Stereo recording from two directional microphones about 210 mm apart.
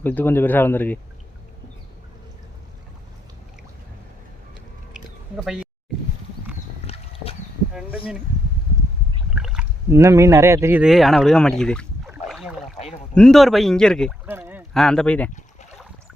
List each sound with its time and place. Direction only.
0.0 s speech: 10° left (ahead or behind)
4.9 s chewing: centre (ahead or behind)
6.8 s a sound: 30° left (ahead or behind)
7.7 s speech: 5° right (ahead or behind)
9.3 s speech: 5° right (ahead or behind)
12.1 s rowboat: 5° right (ahead or behind)
13.1 s speech: centre (ahead or behind)
14.3 s a sound: 10° right (ahead or behind)
14.7 s speech: centre (ahead or behind)